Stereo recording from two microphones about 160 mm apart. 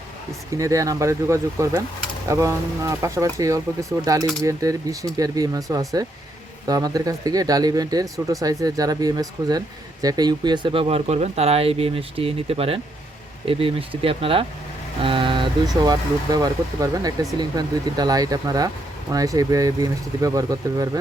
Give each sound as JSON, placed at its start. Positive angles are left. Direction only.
{"t": 0.5, "sound": "speech", "side_deg": -20}
{"t": 15.0, "sound": "a sound", "side_deg": -30}
{"t": 15.8, "sound": "speech", "side_deg": -25}